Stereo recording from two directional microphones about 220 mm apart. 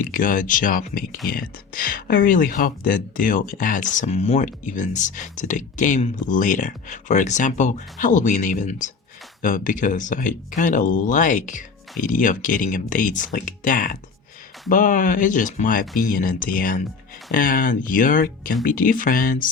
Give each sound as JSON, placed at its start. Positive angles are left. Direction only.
{"t": 0.0, "sound": "speech", "side_deg": 40}